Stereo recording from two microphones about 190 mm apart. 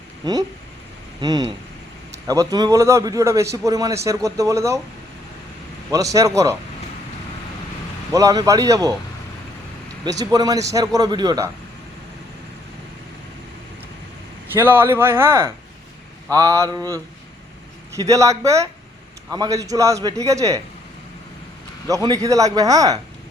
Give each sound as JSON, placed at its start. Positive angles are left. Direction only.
{"t": 1.2, "sound": "a man's voice", "side_deg": -20}
{"t": 5.9, "sound": "a man's voice", "side_deg": -15}
{"t": 8.1, "sound": "a man's voice", "side_deg": -20}
{"t": 10.0, "sound": "a man's voice", "side_deg": -20}
{"t": 14.5, "sound": "a man's voice", "side_deg": -10}
{"t": 21.8, "sound": "a man's voice", "side_deg": -20}